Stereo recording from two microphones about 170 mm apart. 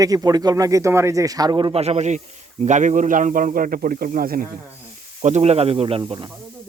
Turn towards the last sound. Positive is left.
turn(degrees=-25)  # may be behind; listen again after turning